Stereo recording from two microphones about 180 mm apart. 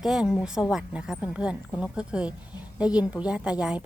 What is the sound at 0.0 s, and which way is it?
Speech, centre (ahead or behind).